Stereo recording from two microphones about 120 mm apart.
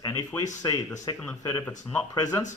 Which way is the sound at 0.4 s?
30° left (ahead or behind).